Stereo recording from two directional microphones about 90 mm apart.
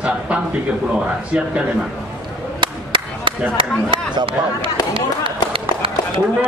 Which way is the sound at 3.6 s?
85° right.